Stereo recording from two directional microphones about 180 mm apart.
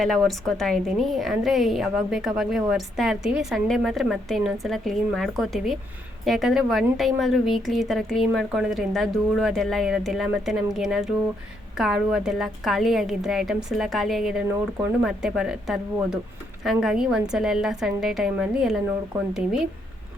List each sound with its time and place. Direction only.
0.0 s a woman's voice: centre (ahead or behind)